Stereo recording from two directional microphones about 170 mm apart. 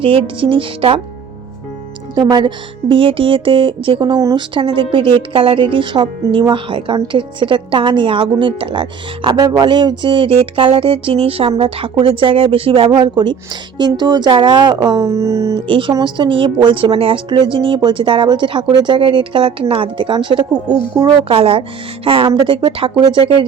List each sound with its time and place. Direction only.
0.0 s speech: 30° right (ahead or behind)
2.9 s a woman's voice: 30° right (ahead or behind)
15.6 s a woman's voice: 30° right (ahead or behind)